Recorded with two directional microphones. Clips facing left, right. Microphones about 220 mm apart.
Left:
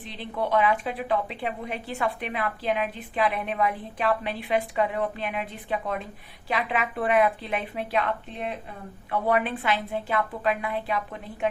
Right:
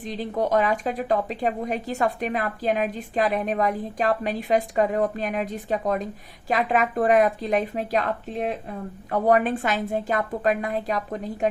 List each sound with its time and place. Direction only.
0.1 s a woman's voice: 40° right (ahead or behind)